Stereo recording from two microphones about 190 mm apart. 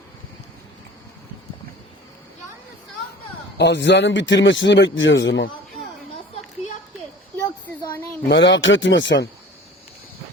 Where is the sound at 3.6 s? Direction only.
65° left (ahead or behind).